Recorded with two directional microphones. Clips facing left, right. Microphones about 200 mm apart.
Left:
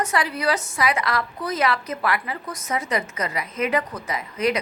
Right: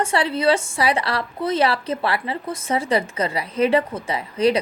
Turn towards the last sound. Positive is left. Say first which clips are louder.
# right 4 dB
turn(degrees=-30)  # may be behind; listen again after turning